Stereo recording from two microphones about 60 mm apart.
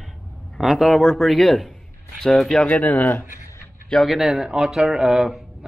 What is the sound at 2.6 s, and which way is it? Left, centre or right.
Speech, left.